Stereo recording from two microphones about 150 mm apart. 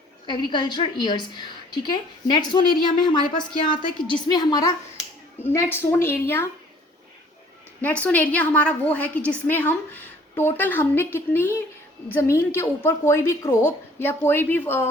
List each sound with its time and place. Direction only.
0.3 s a woman's voice: 30° left (ahead or behind)
5.4 s a woman's voice: 15° left (ahead or behind)
7.8 s a woman's voice: 10° left (ahead or behind)